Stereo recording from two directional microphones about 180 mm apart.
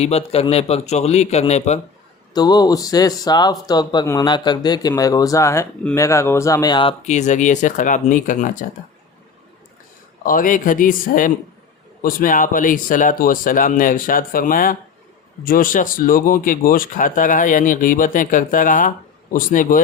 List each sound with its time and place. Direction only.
0.0 s a man's voice: 35° left (ahead or behind)
2.3 s speech: 20° left (ahead or behind)
7.0 s speech: 40° left (ahead or behind)
10.2 s speech: 50° left (ahead or behind)